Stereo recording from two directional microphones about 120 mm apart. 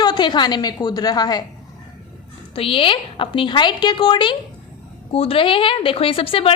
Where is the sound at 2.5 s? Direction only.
50° left (ahead or behind).